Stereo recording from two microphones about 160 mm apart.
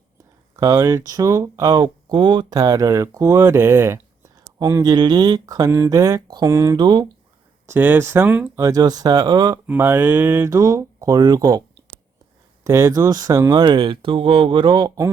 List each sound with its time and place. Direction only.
0.5 s speech: 20° right (ahead or behind)
7.7 s speech: 15° right (ahead or behind)
8.6 s speech: 25° right (ahead or behind)
9.6 s speech: 10° right (ahead or behind)
12.6 s speech: 20° right (ahead or behind)